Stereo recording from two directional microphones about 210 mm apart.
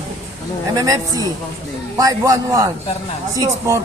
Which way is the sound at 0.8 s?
20° right (ahead or behind).